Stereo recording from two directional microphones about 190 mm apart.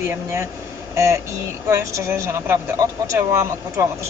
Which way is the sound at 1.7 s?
15° right (ahead or behind).